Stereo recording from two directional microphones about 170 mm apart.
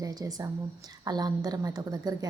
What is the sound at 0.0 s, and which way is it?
A woman's voice, 20° right (ahead or behind).